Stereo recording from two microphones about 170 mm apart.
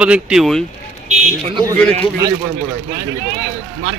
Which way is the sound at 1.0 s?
45° right (ahead or behind).